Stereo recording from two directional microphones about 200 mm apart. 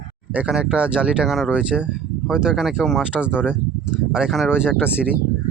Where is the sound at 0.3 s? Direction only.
5° right (ahead or behind).